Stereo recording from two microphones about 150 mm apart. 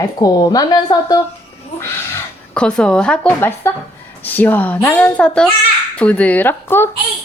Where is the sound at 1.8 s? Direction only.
10° left (ahead or behind).